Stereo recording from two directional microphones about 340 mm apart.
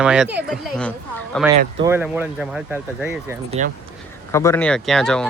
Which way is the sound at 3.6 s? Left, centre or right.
Right.